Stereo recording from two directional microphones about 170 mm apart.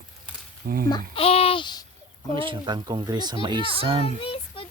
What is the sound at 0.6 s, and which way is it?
Speech, 60° right (ahead or behind).